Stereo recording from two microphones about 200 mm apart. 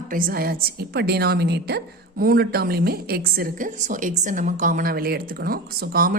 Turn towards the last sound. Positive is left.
turn(degrees=-45)  # may be behind; listen again after turning